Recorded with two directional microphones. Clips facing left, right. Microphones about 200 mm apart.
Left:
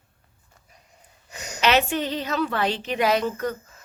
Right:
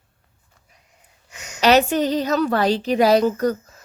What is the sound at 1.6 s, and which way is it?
A woman's voice, 40° right (ahead or behind).